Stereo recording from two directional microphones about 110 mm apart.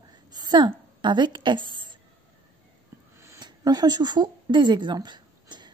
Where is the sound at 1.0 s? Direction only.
45° right (ahead or behind).